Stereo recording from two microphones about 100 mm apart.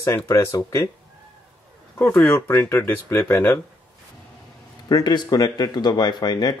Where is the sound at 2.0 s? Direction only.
25° left (ahead or behind).